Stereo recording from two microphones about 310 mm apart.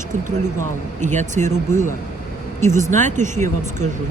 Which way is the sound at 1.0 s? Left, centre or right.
Right.